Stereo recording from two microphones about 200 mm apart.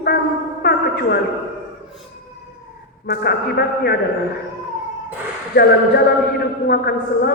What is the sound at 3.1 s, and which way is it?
Speech, 55° left (ahead or behind).